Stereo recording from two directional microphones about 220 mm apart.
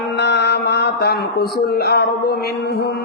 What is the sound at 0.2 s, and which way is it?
Speech, 50° left (ahead or behind).